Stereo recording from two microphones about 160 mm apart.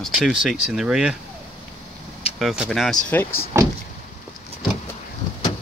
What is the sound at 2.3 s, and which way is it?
Speech, 5° right (ahead or behind).